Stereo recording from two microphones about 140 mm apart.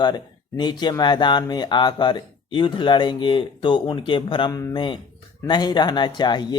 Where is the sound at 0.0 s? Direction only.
30° left (ahead or behind).